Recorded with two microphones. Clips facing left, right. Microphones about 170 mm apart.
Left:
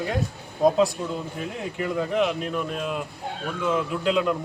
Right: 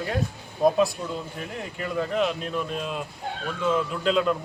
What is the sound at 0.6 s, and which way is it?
Speech, 20° left (ahead or behind).